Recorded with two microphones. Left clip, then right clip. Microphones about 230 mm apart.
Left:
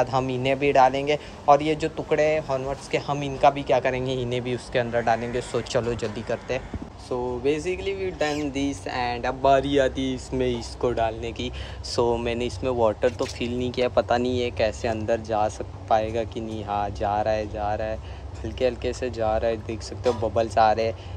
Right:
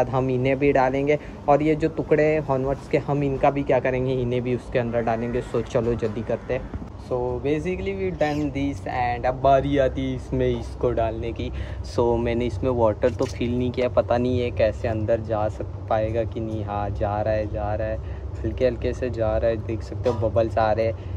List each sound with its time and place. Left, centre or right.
0.0 s speech: centre